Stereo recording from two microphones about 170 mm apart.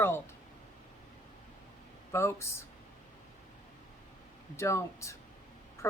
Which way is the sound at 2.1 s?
15° left (ahead or behind).